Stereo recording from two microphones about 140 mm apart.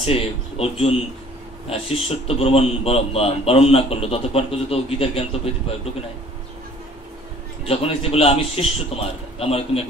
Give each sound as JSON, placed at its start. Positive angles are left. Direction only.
{"t": 0.0, "sound": "speech", "side_deg": 45}
{"t": 7.6, "sound": "speech", "side_deg": 45}